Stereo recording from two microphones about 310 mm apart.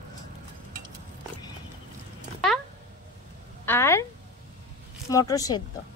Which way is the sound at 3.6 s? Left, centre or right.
Centre.